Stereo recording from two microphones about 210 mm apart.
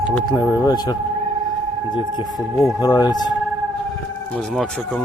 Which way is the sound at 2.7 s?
20° left (ahead or behind).